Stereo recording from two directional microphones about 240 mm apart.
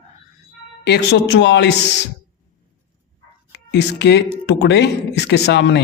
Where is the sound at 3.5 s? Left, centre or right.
Left.